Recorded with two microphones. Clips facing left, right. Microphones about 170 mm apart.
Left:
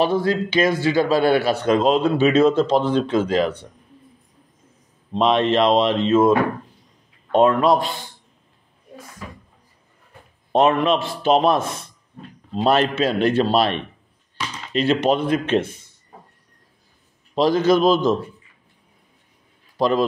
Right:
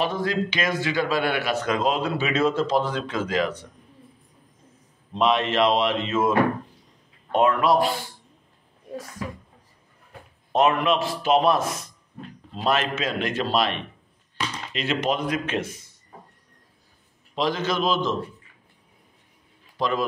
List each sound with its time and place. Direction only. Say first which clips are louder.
0.0 s a man's voice: left 5 dB; 30° left (ahead or behind)
5.1 s a man's voice: left 4 dB; 30° left (ahead or behind)
7.3 s a man's voice: left 5 dB; 30° left (ahead or behind)
10.5 s a man's voice: left 4 dB; 30° left (ahead or behind)
17.4 s a man's voice: left 8 dB; 35° left (ahead or behind)
19.8 s a man's voice: left 6 dB; 35° left (ahead or behind)